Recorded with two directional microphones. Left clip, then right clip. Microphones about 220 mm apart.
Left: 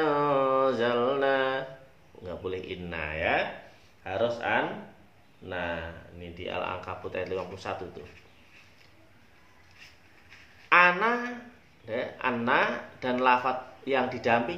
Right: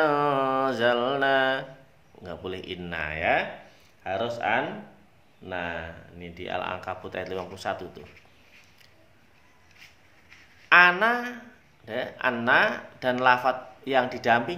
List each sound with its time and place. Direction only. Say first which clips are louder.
0.0 s mantra: right 2 dB; 50° right (ahead or behind)
2.2 s speech: even; 50° right (ahead or behind)
6.1 s speech: right 2 dB; 45° right (ahead or behind)
10.7 s speech: right 3 dB; 45° right (ahead or behind)